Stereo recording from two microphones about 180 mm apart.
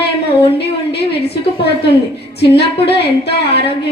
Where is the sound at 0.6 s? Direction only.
65° left (ahead or behind).